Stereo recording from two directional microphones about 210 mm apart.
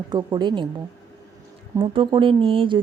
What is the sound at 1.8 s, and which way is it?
Speech, 25° right (ahead or behind).